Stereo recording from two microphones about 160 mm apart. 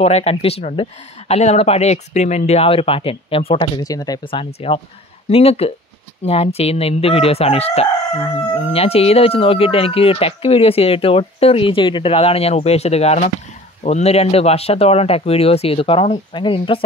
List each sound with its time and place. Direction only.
0.0 s speech: 40° left (ahead or behind)